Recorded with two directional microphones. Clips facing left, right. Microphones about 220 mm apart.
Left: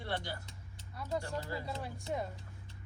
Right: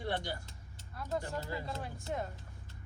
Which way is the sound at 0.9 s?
Centre (ahead or behind).